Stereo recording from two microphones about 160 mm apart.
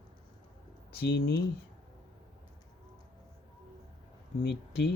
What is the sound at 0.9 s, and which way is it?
Speech, 85° left.